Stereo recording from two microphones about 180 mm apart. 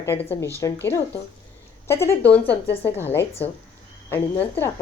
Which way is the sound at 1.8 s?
15° left (ahead or behind).